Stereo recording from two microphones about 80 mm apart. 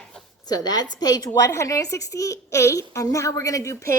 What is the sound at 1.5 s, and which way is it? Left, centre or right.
A woman's voice, left.